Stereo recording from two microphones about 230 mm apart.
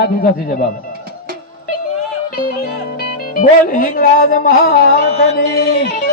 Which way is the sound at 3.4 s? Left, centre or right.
Left.